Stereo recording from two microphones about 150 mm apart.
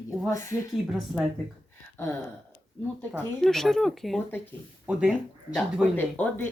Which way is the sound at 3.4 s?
Centre (ahead or behind).